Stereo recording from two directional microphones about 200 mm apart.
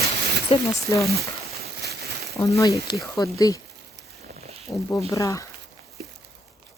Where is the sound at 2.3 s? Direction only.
15° left (ahead or behind).